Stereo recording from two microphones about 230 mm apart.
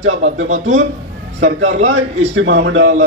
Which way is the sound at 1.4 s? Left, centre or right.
Right.